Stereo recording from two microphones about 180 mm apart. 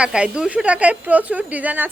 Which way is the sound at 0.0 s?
5° right (ahead or behind).